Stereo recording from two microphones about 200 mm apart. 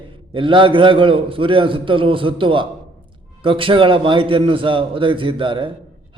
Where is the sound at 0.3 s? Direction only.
25° right (ahead or behind).